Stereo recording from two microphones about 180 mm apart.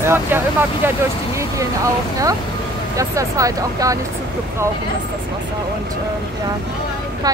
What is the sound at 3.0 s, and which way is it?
Speech, 20° right (ahead or behind).